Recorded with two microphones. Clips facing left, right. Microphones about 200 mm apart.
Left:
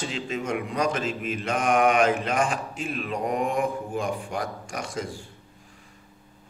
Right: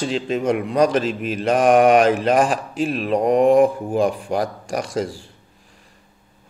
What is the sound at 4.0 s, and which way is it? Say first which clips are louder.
Mantra: right 11 dB; 35° right (ahead or behind).